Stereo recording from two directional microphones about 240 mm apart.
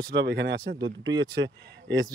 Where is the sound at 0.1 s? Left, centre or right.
Right.